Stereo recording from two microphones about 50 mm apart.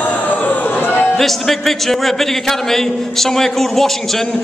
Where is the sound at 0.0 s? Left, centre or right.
Left.